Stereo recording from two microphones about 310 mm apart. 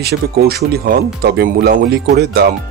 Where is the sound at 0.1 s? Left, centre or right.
Right.